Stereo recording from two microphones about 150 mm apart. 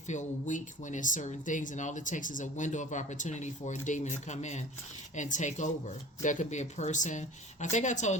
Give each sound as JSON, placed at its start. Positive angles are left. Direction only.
{"t": 0.1, "sound": "speech", "side_deg": 55}